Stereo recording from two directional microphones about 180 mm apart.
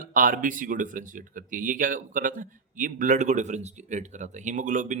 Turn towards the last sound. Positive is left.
turn(degrees=-45)  # may be behind; listen again after turning